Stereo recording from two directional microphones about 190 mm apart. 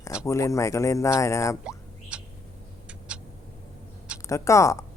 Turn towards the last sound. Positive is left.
turn(degrees=15)  # may be behind; listen again after turning